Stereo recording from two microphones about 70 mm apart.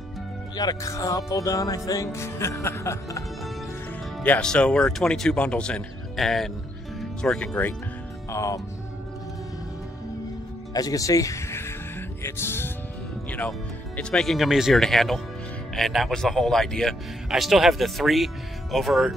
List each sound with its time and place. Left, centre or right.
0.8 s speech: left
2.1 s music: left
4.4 s speech: centre
6.1 s speech: centre
7.2 s speech: centre
8.3 s speech: left
10.7 s speech: left
12.2 s music: left
14.1 s speech: centre